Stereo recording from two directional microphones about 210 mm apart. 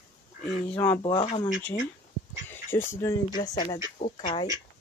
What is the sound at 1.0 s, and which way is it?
Speech, 25° left (ahead or behind).